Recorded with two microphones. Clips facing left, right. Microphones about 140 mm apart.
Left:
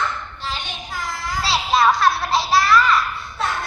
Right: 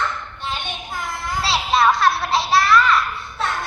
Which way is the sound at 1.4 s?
Centre (ahead or behind).